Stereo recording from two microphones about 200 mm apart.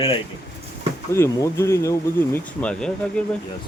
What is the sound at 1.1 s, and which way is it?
Speech, 15° left (ahead or behind).